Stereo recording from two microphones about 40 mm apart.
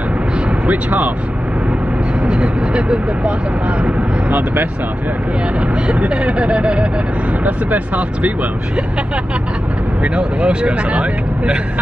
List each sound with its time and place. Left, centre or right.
0.7 s speech: right
2.2 s speech: right
4.3 s speech: right
5.9 s speech: right
7.4 s speech: right
10.0 s speech: right